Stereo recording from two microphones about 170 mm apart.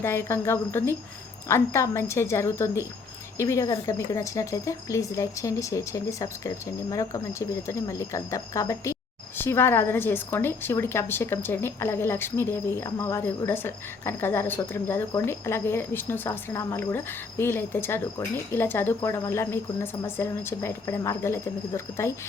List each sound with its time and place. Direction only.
0.0 s a woman's voice: 15° left (ahead or behind)